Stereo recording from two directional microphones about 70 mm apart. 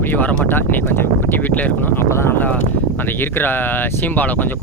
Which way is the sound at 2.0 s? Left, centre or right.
Left.